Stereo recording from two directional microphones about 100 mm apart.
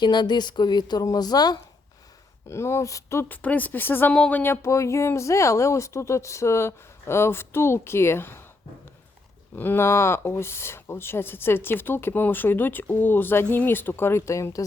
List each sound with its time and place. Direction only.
0.0 s a woman's voice: 45° left (ahead or behind)
2.5 s speech: 25° left (ahead or behind)
9.6 s speech: 20° left (ahead or behind)